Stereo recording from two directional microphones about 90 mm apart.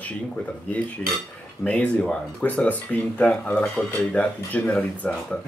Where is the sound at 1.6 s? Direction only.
15° left (ahead or behind).